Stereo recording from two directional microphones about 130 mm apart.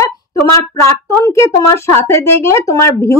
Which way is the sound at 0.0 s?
20° left (ahead or behind).